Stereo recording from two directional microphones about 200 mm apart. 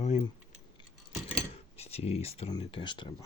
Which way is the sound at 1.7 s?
30° left (ahead or behind).